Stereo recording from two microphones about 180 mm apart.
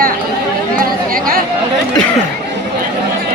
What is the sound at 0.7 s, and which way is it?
Speech, 55° right (ahead or behind).